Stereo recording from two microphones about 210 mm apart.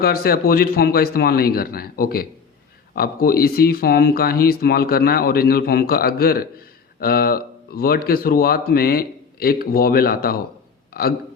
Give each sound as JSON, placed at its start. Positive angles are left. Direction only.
{"t": 0.0, "sound": "speech", "side_deg": 45}